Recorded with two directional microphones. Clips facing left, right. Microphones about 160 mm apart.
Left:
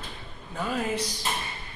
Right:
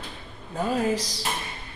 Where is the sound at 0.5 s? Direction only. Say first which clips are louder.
Right 5 dB; 40° right (ahead or behind).